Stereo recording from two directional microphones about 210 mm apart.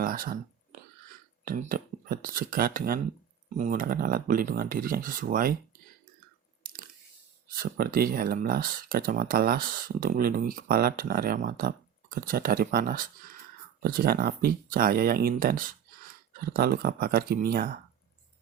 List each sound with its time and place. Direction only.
0.0 s whispering: 40° right (ahead or behind)
1.5 s speech: 40° right (ahead or behind)
7.5 s speech: 45° right (ahead or behind)